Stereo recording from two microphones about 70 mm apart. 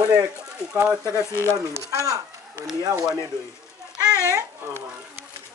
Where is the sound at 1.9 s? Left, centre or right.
Right.